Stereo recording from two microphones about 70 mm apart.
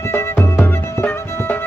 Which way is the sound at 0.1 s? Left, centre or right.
Left.